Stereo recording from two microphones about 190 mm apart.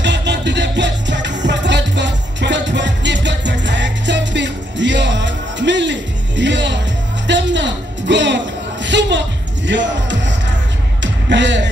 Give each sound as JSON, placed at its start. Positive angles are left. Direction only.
{"t": 0.0, "sound": "music", "side_deg": -65}